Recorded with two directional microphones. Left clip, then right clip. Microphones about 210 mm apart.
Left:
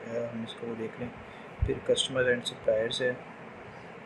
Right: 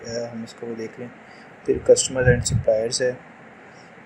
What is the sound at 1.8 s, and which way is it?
Speech, 15° right (ahead or behind).